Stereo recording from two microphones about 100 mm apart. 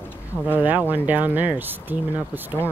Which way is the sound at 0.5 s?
15° right (ahead or behind).